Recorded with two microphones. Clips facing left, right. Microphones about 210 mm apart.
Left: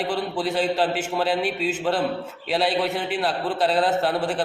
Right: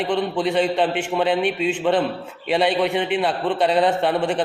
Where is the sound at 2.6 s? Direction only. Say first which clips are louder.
Right 3 dB; 60° right (ahead or behind).